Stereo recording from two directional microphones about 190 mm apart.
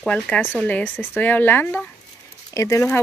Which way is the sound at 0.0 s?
5° left (ahead or behind).